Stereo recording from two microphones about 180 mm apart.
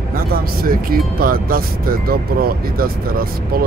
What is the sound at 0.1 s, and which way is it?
Speech, 55° right (ahead or behind).